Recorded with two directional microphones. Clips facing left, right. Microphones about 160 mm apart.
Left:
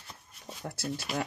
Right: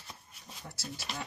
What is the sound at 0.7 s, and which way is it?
Speech, 55° left (ahead or behind).